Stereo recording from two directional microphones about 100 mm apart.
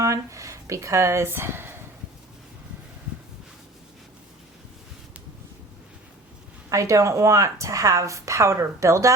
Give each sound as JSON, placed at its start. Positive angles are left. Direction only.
{"t": 0.0, "sound": "speech", "side_deg": -30}
{"t": 6.7, "sound": "speech", "side_deg": -30}